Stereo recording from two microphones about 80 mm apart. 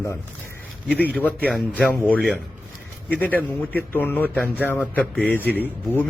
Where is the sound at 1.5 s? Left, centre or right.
Centre.